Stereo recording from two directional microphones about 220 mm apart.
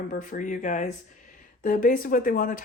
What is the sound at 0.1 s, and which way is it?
Speech, 35° left (ahead or behind).